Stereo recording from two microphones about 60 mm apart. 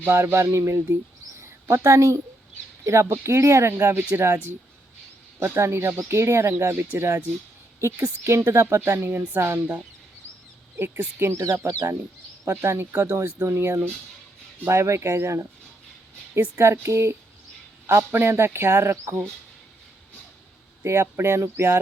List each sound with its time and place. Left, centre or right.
0.0 s speech: right
1.4 s a sound: right
2.8 s speech: right
11.3 s speech: right
12.5 s speech: right
13.0 s speech: right
16.7 s speech: right
20.8 s speech: right